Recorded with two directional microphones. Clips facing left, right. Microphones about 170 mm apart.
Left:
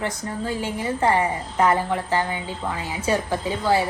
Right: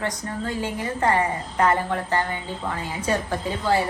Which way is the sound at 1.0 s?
15° left (ahead or behind).